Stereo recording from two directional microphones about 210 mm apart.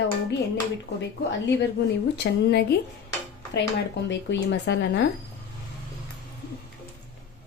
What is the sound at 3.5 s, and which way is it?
Speech, 55° left (ahead or behind).